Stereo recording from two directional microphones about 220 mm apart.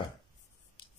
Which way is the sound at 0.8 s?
20° left (ahead or behind).